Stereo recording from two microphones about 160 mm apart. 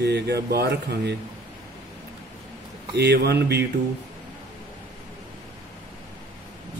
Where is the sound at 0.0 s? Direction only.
90° right.